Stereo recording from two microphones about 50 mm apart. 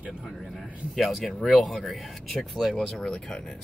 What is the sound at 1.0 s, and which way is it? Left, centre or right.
Speech, centre.